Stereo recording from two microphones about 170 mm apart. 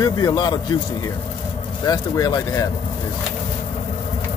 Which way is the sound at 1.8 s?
20° left (ahead or behind).